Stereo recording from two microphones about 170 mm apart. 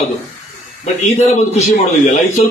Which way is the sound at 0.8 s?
40° left (ahead or behind).